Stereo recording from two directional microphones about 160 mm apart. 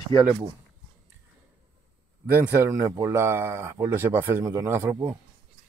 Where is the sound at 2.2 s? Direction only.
15° right (ahead or behind).